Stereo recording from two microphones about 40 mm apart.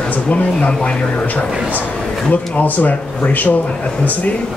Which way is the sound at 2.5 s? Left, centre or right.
Left.